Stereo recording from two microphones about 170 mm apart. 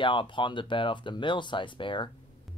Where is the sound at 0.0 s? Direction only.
30° left (ahead or behind).